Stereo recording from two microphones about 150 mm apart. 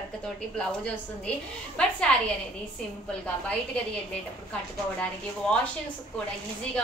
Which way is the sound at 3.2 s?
10° left (ahead or behind).